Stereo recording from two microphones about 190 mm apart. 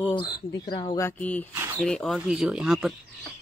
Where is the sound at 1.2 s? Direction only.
10° left (ahead or behind).